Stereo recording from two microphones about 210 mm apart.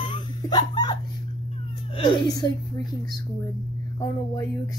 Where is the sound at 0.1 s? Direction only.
20° left (ahead or behind).